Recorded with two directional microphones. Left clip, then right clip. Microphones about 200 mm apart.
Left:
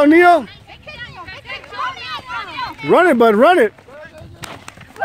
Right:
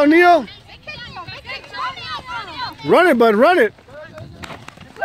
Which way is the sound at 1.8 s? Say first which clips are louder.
Left 2 dB; 50° right (ahead or behind).